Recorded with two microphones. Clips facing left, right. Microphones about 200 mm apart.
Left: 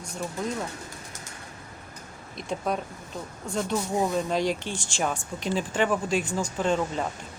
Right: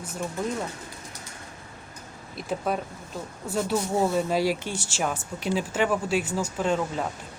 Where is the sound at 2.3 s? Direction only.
5° right (ahead or behind).